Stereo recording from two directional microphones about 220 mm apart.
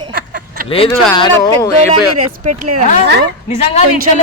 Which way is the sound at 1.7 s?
30° right (ahead or behind).